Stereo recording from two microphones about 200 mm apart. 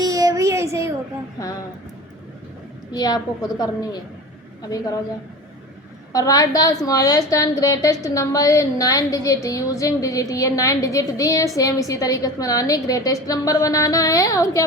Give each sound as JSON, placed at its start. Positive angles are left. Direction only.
{"t": 0.0, "sound": "a sound", "side_deg": -15}
{"t": 2.9, "sound": "a woman's voice", "side_deg": 20}
{"t": 6.1, "sound": "a woman's voice", "side_deg": 15}